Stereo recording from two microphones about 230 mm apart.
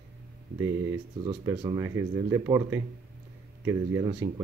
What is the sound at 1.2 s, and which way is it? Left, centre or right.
Speech, centre.